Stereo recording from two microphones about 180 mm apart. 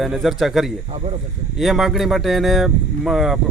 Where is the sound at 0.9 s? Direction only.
35° right (ahead or behind).